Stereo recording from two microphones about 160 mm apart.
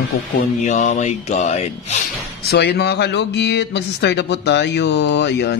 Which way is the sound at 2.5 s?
90° left.